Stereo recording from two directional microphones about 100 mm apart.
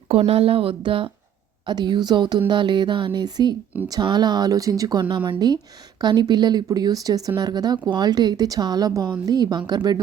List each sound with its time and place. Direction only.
0.1 s a woman's voice: 85° right; by 1.1 s 60° right (ahead or behind)
1.6 s speech: 50° right (ahead or behind)